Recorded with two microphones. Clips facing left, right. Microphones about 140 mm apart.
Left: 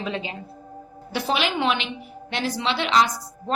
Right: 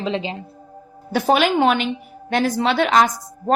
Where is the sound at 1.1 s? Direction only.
45° right (ahead or behind).